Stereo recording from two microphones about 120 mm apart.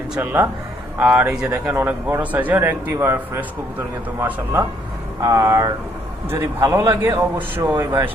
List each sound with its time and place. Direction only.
0.1 s speech: 15° right (ahead or behind)
5.2 s a man's voice: 25° right (ahead or behind)